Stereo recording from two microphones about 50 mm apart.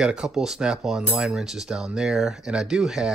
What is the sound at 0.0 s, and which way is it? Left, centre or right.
Cutlery, centre.